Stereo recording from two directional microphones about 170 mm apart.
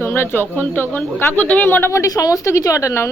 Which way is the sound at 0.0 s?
15° left (ahead or behind).